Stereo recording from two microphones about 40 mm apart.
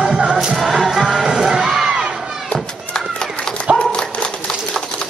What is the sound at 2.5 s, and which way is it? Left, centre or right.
Children playing, left.